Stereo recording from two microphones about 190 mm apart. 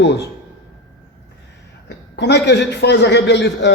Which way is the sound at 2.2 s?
65° left (ahead or behind).